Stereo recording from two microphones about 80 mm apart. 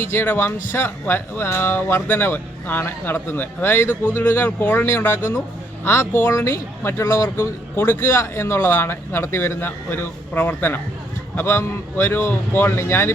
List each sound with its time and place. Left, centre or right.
0.0 s speech: left